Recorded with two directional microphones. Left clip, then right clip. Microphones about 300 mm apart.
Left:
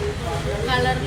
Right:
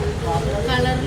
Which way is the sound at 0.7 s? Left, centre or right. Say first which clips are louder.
Left 1 dB; centre.